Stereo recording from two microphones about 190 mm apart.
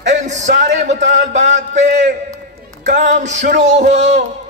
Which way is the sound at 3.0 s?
40° right (ahead or behind).